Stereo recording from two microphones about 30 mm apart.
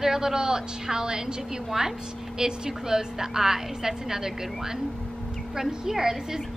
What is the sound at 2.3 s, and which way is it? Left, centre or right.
A woman's voice, right.